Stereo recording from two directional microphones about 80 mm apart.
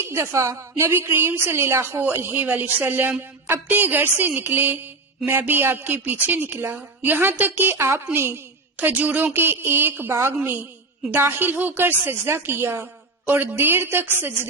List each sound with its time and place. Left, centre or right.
0.0 s a woman's voice: right